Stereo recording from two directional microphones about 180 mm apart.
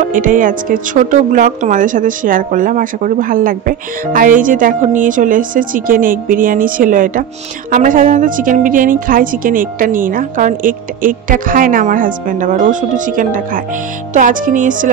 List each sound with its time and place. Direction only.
0.1 s speech: 45° right (ahead or behind)